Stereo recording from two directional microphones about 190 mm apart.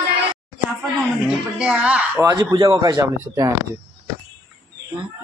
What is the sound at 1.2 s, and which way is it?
Speech, 5° right (ahead or behind).